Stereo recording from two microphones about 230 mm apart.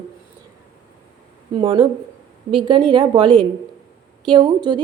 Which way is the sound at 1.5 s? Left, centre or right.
Right.